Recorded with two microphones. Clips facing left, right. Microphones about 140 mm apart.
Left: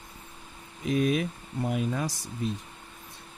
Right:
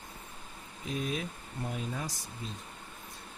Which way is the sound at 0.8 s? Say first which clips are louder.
Left 9 dB; 80° left.